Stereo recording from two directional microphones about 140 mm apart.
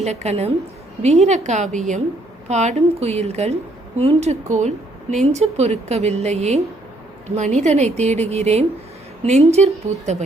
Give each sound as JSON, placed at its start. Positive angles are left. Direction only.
{"t": 0.0, "sound": "a woman's voice", "side_deg": -50}
{"t": 9.9, "sound": "speech", "side_deg": -20}